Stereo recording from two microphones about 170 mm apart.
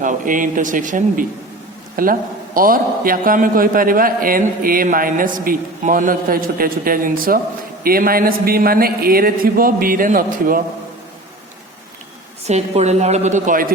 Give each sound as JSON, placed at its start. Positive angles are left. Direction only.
{"t": 0.0, "sound": "a man's voice", "side_deg": -50}
{"t": 12.5, "sound": "a woman's voice", "side_deg": -40}